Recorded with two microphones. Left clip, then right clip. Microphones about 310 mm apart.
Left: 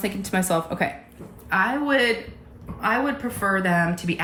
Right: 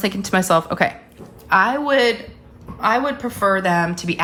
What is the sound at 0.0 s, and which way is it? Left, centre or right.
Speech, centre.